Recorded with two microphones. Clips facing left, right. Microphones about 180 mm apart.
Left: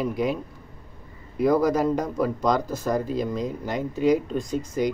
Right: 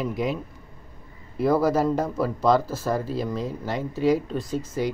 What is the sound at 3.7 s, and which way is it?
Speech, 15° left (ahead or behind).